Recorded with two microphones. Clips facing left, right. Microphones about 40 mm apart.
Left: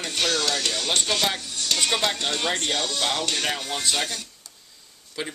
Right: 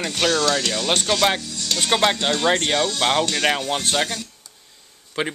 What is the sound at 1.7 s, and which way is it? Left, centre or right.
Speech, right.